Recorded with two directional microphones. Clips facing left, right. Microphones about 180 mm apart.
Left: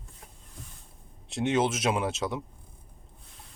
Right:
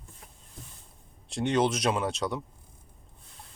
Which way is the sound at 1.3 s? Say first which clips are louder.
Even; 5° left (ahead or behind).